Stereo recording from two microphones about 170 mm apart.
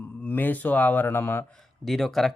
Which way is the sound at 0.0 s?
10° left (ahead or behind).